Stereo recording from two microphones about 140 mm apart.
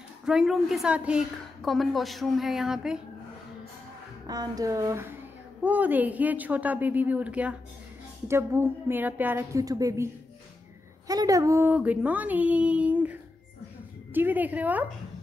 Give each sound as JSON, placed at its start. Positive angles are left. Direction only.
{"t": 0.2, "sound": "a woman's voice", "side_deg": -5}
{"t": 4.3, "sound": "a woman's voice", "side_deg": -25}
{"t": 11.1, "sound": "speech", "side_deg": -25}
{"t": 11.7, "sound": "a woman's voice", "side_deg": -10}